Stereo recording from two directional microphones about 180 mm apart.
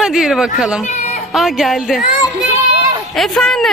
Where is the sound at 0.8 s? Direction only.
40° left (ahead or behind).